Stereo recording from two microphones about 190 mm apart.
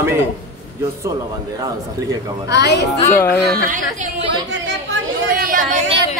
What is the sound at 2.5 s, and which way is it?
Speech, 60° left (ahead or behind).